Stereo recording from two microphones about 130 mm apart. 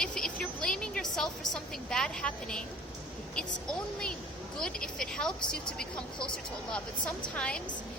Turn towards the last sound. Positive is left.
turn(degrees=10)  # may be behind; listen again after turning